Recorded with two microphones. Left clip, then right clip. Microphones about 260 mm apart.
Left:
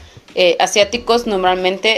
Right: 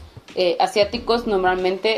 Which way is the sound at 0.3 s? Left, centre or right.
Left.